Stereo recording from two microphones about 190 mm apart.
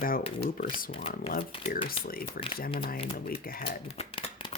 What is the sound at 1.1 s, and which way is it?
Speech, 50° left (ahead or behind).